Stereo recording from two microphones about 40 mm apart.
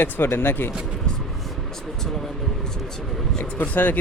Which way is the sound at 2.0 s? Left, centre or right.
Centre.